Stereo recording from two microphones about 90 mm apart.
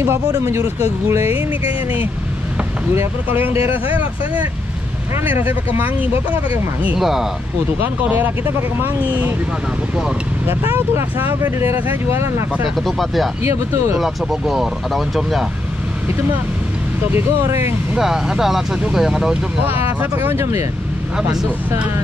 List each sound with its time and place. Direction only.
0.0 s speech: 30° right (ahead or behind)
1.2 s speech: 90° left
2.9 s speech: 25° right (ahead or behind)
5.2 s speech: 20° right (ahead or behind)
7.0 s speech: 5° right (ahead or behind)
7.8 s speech: 20° right (ahead or behind)
10.4 s speech: 25° right (ahead or behind)
12.6 s speech: centre (ahead or behind)
13.4 s speech: 30° right (ahead or behind)
13.9 s speech: 5° right (ahead or behind)
17.1 s speech: 30° right (ahead or behind)
17.9 s speech: 5° right (ahead or behind)
20.0 s speech: 25° right (ahead or behind)